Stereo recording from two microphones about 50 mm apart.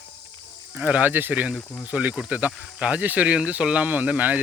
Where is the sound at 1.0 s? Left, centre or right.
Right.